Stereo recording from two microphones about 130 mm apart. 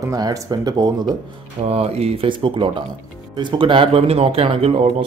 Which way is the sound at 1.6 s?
55° right (ahead or behind).